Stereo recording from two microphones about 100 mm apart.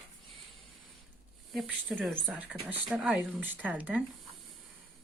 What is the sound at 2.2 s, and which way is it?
Speech, 15° right (ahead or behind).